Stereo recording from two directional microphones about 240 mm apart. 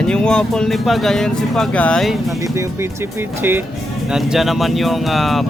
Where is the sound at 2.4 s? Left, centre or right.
Centre.